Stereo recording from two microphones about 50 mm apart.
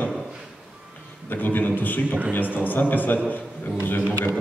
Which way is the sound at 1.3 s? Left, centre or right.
Left.